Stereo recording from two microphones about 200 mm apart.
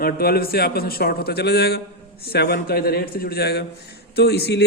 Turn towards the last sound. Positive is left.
turn(degrees=55)  # may be behind; listen again after turning